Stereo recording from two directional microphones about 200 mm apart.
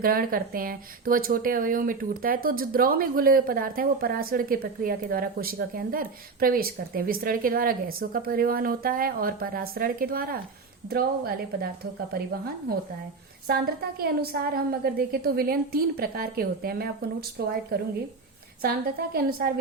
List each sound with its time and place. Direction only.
0.0 s speech: 45° right (ahead or behind)
18.6 s speech: 50° right (ahead or behind)